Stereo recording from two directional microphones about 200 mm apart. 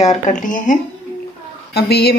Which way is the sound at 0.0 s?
35° left (ahead or behind).